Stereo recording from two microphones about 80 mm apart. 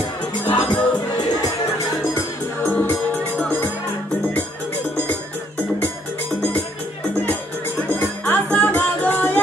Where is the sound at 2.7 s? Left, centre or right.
Left.